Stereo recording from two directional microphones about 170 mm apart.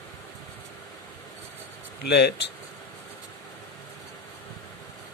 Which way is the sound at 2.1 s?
80° left.